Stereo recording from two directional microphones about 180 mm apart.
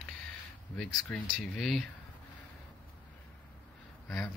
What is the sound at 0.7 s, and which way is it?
Speech, 10° left (ahead or behind).